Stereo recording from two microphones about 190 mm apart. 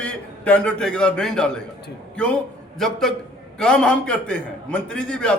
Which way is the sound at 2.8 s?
Centre (ahead or behind).